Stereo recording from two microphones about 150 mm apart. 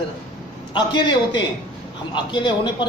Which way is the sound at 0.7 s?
30° left (ahead or behind).